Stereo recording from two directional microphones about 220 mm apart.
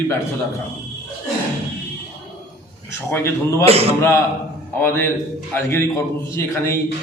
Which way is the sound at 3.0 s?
10° left (ahead or behind).